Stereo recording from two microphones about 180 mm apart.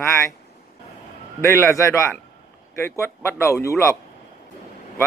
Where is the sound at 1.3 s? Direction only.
15° left (ahead or behind).